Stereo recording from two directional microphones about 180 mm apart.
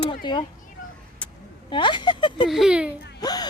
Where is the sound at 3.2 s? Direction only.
20° left (ahead or behind).